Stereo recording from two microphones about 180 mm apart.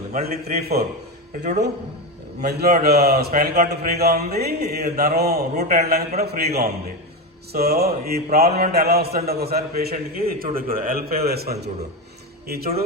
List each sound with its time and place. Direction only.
0.1 s a man's voice: 55° right (ahead or behind)
1.3 s speech: 40° right (ahead or behind)
2.4 s a man's voice: 60° right (ahead or behind)